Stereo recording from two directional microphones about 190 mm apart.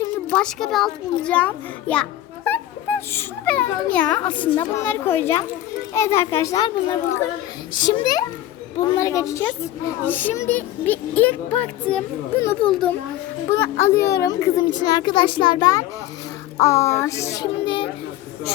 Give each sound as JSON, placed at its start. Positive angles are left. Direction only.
{"t": 0.3, "sound": "a child's voice", "side_deg": 5}